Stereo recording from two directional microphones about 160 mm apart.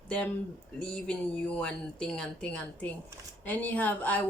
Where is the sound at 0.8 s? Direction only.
5° left (ahead or behind).